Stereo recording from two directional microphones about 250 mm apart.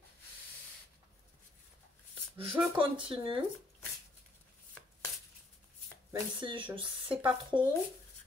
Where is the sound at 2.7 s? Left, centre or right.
Right.